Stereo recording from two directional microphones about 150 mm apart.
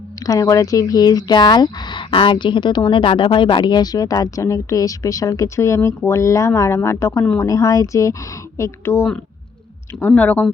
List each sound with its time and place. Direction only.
0.2 s speech: 20° left (ahead or behind)